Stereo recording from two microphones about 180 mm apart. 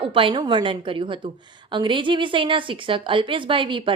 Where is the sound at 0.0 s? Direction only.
30° right (ahead or behind).